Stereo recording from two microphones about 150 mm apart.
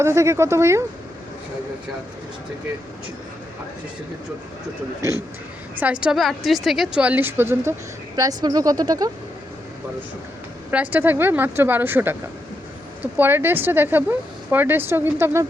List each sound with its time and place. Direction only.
0.0 s a woman's voice: 20° right (ahead or behind)
5.8 s a woman's voice: 5° right (ahead or behind); by 9.0 s 25° right (ahead or behind)
10.7 s a woman's voice: 10° right (ahead or behind)
13.1 s a woman's voice: 15° right (ahead or behind)